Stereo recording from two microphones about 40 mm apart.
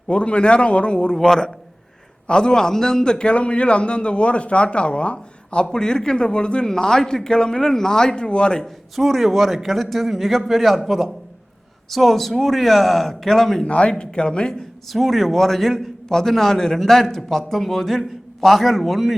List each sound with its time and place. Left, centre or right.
0.1 s a man's voice: left
2.2 s a man's voice: left
5.6 s a man's voice: centre
9.0 s a man's voice: centre
13.7 s a man's voice: left
14.9 s a man's voice: centre